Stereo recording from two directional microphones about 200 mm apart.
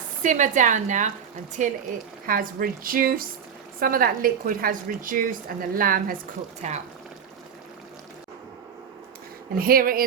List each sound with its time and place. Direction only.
0.2 s a woman's voice: 40° right (ahead or behind)
6.6 s a woman's voice: 35° right (ahead or behind)
9.6 s a woman's voice: 45° right (ahead or behind)